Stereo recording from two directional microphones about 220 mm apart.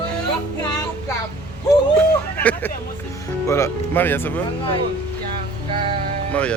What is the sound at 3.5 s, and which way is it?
Speech, 10° left (ahead or behind).